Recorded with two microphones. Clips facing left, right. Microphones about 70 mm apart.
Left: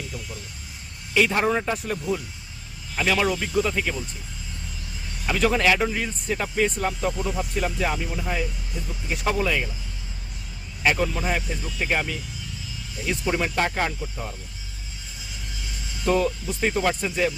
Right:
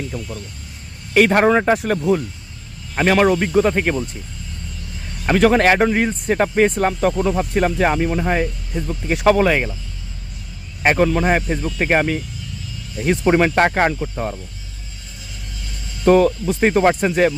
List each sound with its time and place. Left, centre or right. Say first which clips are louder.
1.1 s speech: right 8 dB; right
2.9 s speech: right 8 dB; right
5.2 s speech: right 7 dB; right
10.8 s speech: right 8 dB; right
16.0 s speech: right 9 dB; right